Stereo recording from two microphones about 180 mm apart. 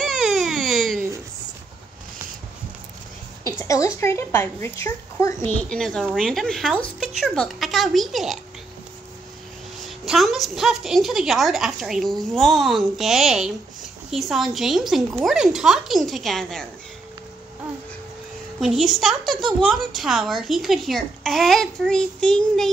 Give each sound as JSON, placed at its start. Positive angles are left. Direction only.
{"t": 0.0, "sound": "baby cry", "side_deg": 0}
{"t": 3.4, "sound": "speech", "side_deg": 20}
{"t": 5.7, "sound": "a woman's voice", "side_deg": 0}
{"t": 9.8, "sound": "a woman's voice", "side_deg": 0}
{"t": 18.6, "sound": "a woman's voice", "side_deg": 0}